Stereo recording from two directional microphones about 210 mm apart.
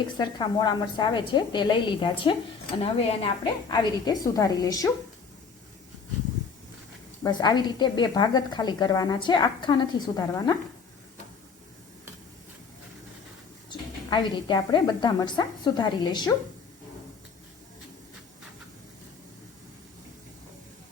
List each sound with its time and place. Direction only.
0.2 s a woman's voice: 20° left (ahead or behind)
7.3 s a woman's voice: 20° left (ahead or behind)
13.7 s a woman's voice: 20° left (ahead or behind)